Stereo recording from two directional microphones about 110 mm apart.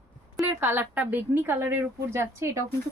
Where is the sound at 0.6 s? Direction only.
20° right (ahead or behind).